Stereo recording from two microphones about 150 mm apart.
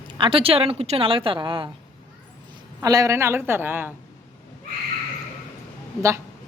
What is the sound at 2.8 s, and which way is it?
A woman's voice, 25° right (ahead or behind).